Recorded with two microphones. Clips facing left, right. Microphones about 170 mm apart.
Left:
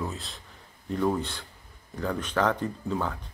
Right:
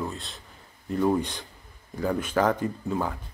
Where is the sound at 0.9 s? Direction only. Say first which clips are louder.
Right 3 dB; 5° right (ahead or behind).